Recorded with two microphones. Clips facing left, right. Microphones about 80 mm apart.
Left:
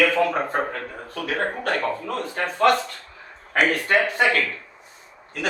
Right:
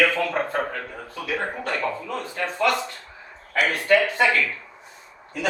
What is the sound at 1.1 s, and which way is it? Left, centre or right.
Speech, left.